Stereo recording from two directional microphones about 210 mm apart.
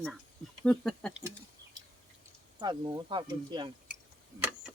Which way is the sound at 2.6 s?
20° right (ahead or behind).